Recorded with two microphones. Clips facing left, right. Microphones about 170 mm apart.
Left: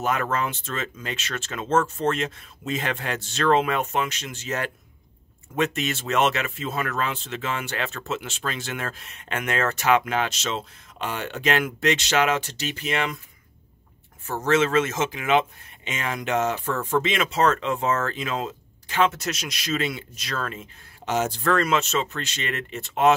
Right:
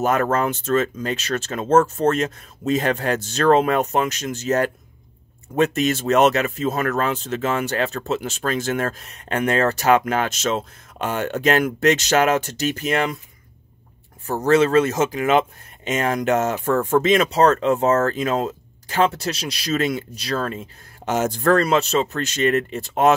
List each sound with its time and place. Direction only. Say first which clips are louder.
0.0 s speech: right 6 dB; 45° right (ahead or behind)
14.2 s speech: right 5 dB; 35° right (ahead or behind)